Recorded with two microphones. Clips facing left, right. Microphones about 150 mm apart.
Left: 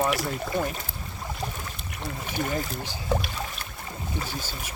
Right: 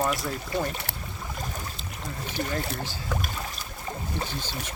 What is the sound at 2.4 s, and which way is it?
Speech, 45° right (ahead or behind).